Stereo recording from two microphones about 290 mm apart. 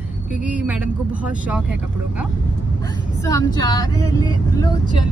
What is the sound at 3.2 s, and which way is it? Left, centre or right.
Speech, centre.